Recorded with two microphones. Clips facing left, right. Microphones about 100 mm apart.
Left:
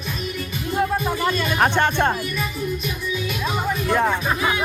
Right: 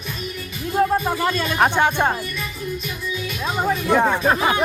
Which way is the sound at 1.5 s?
10° right (ahead or behind).